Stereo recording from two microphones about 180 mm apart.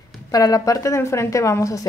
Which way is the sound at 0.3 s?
20° left (ahead or behind).